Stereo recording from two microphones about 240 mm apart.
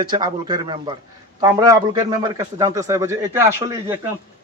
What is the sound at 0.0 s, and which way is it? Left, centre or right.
A man's voice, centre.